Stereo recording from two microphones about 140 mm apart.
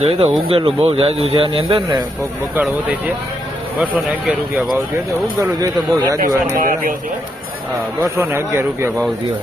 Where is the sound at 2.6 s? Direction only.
15° right (ahead or behind).